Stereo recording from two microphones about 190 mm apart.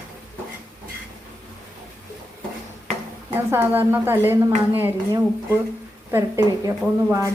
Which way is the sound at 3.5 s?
10° right (ahead or behind).